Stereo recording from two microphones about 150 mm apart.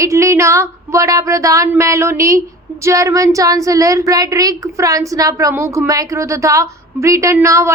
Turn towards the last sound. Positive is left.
turn(degrees=-20)  # may be behind; listen again after turning